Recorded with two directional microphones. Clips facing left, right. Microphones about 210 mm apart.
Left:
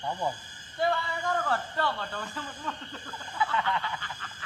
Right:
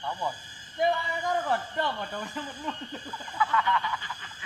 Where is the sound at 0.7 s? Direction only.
15° right (ahead or behind).